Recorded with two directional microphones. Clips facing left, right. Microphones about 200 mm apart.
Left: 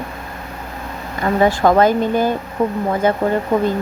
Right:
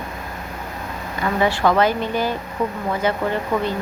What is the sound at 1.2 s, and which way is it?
Speech, 45° left (ahead or behind).